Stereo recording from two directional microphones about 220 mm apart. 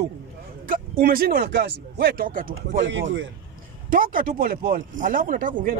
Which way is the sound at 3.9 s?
40° right (ahead or behind).